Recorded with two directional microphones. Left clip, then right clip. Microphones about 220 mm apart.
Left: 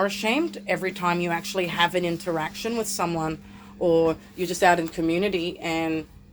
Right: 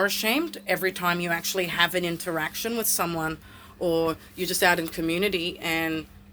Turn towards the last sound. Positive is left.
turn(degrees=-25)  # may be behind; listen again after turning